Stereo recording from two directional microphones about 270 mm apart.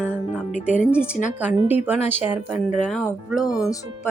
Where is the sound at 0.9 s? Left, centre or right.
Centre.